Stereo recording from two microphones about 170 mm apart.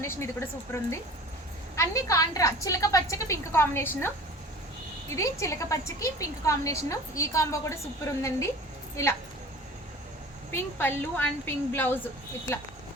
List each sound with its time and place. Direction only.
0.0 s a woman's voice: 15° left (ahead or behind)
5.1 s a woman's voice: 20° left (ahead or behind)
10.5 s a woman's voice: 10° left (ahead or behind)